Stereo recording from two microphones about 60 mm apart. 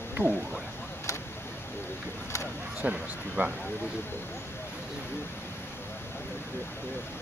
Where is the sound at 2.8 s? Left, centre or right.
Right.